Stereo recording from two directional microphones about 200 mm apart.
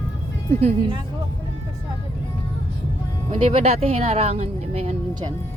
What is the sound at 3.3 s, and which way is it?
Speech, 30° right (ahead or behind).